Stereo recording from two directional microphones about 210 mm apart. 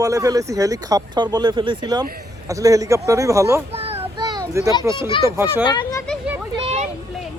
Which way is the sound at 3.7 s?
25° right (ahead or behind).